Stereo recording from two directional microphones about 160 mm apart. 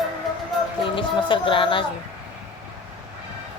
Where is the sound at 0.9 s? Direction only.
30° left (ahead or behind).